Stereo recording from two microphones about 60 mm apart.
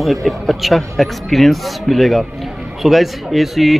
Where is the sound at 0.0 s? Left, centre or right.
Centre.